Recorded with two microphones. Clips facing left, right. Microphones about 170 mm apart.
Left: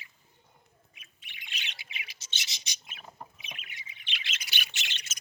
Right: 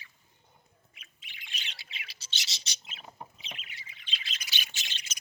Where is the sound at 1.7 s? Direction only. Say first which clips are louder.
Left 2 dB; 15° left (ahead or behind).